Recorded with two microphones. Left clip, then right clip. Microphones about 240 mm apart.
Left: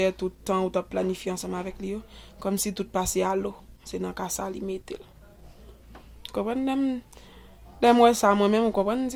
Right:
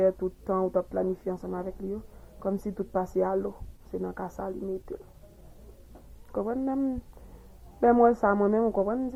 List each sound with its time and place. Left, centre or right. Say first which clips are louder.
0.0 s speech: right 1 dB; left
3.0 s speech: left 2 dB; left
6.3 s speech: left 2 dB; left